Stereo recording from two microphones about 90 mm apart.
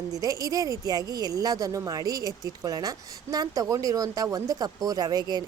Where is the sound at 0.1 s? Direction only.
45° right (ahead or behind).